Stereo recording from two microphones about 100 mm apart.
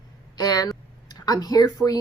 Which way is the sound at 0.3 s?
40° left (ahead or behind).